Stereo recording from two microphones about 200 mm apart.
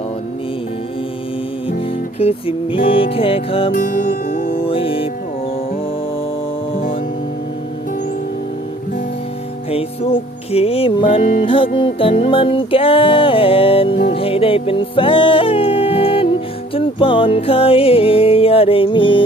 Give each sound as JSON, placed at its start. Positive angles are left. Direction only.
{"t": 2.1, "sound": "music", "side_deg": 30}
{"t": 3.8, "sound": "music", "side_deg": 45}
{"t": 4.6, "sound": "music", "side_deg": 25}
{"t": 9.6, "sound": "music", "side_deg": 30}